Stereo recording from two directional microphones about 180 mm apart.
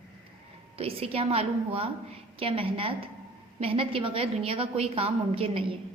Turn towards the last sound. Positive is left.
turn(degrees=-30)  # may be behind; listen again after turning